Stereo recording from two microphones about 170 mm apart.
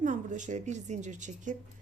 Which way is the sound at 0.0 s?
45° right (ahead or behind).